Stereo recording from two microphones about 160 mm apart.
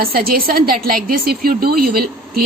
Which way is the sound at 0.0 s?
65° right (ahead or behind).